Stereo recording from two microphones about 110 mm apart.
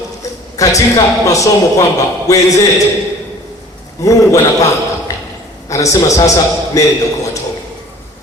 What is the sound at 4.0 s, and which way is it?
Speech, 30° left (ahead or behind).